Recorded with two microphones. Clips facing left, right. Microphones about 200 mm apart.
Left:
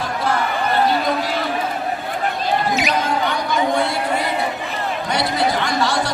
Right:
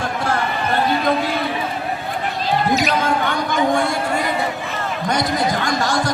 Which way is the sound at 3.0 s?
50° right (ahead or behind).